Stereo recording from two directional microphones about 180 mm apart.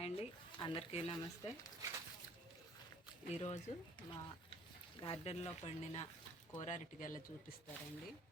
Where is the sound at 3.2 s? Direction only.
35° left (ahead or behind).